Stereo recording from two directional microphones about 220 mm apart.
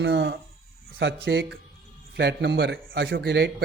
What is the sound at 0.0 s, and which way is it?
A man's voice, 50° right (ahead or behind).